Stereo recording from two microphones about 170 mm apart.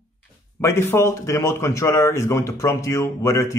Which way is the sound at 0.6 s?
15° left (ahead or behind).